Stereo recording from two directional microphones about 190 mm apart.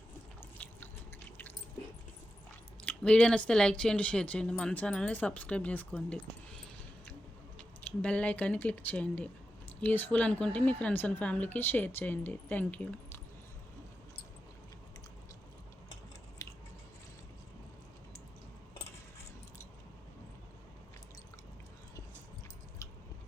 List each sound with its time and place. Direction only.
0.6 s drip: 10° left (ahead or behind)
2.8 s speech: 5° left (ahead or behind)
8.0 s a woman's voice: 5° left (ahead or behind)
16.4 s biting: 15° left (ahead or behind)